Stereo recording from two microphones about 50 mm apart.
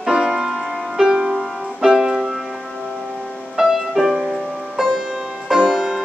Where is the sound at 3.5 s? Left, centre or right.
Centre.